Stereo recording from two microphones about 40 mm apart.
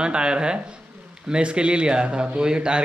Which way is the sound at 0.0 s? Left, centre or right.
Right.